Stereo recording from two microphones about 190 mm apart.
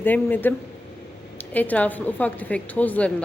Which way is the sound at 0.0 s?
10° left (ahead or behind).